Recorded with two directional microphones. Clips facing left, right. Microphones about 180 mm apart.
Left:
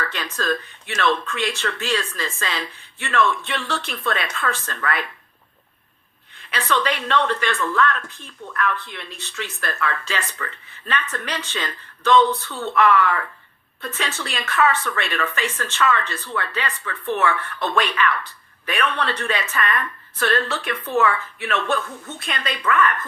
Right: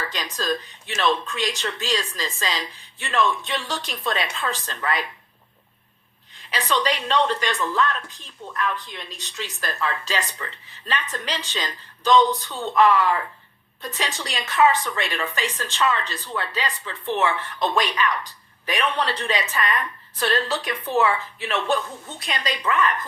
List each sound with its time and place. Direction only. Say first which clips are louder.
0.0 s speech: left 2 dB; 15° right (ahead or behind)
6.5 s speech: left 1 dB; 15° right (ahead or behind)